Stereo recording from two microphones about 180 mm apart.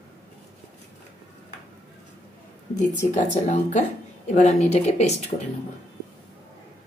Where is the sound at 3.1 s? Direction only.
45° left (ahead or behind).